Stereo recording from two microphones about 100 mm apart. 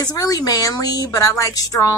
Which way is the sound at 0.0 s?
40° left (ahead or behind).